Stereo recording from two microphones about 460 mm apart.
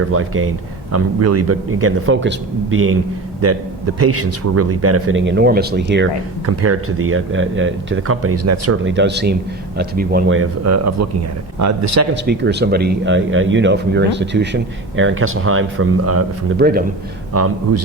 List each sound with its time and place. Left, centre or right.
0.1 s a man's voice: right
12.1 s speech: right
17.3 s a man's voice: right